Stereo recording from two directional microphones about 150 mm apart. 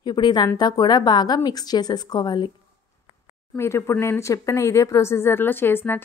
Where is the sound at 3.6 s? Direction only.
20° left (ahead or behind).